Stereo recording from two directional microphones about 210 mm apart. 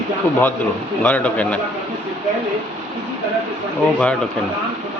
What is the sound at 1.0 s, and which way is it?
Speech, 5° left (ahead or behind).